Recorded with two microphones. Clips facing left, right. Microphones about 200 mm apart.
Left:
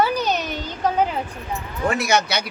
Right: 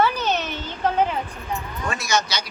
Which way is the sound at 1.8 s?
60° left (ahead or behind).